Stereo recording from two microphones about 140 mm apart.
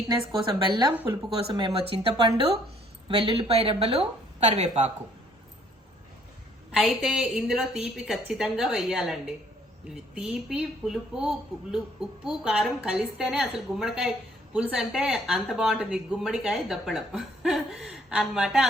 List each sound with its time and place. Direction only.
0.1 s speech: 35° right (ahead or behind); by 4.9 s 55° right (ahead or behind)
6.7 s speech: centre (ahead or behind)